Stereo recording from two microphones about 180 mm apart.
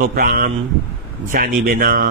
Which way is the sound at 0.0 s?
55° right (ahead or behind).